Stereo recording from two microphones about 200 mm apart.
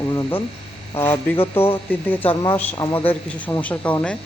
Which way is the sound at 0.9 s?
15° left (ahead or behind).